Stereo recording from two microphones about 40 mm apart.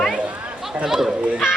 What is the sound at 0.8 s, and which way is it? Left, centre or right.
Speech, centre.